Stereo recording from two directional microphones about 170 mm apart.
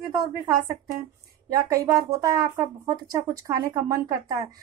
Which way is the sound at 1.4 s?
20° right (ahead or behind).